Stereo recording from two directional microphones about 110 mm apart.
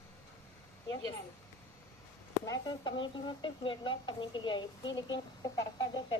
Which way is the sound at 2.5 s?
45° left (ahead or behind).